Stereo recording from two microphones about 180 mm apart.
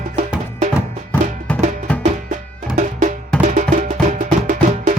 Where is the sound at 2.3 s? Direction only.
45° right (ahead or behind).